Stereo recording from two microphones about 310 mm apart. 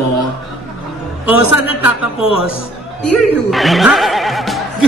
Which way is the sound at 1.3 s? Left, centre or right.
Right.